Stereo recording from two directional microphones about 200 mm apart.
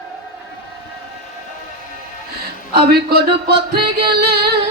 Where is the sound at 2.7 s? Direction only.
50° right (ahead or behind).